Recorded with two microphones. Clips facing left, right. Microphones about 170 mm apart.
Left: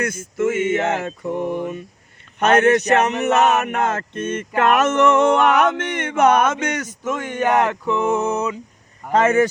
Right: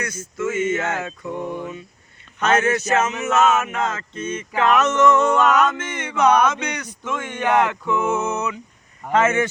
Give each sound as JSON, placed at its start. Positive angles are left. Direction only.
{"t": 0.0, "sound": "speech", "side_deg": 55}
{"t": 0.7, "sound": "speech", "side_deg": 25}
{"t": 1.0, "sound": "speech", "side_deg": 50}
{"t": 1.4, "sound": "a sound", "side_deg": 10}
{"t": 2.4, "sound": "speech", "side_deg": 60}